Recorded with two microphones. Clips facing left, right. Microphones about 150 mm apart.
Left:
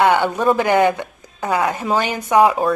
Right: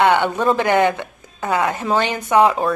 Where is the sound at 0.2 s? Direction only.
5° left (ahead or behind).